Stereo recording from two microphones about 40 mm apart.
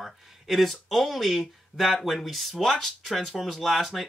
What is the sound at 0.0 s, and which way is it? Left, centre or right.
Speech, centre.